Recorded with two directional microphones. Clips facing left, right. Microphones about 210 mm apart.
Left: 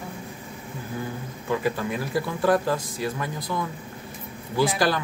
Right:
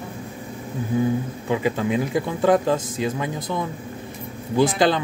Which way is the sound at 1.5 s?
20° right (ahead or behind).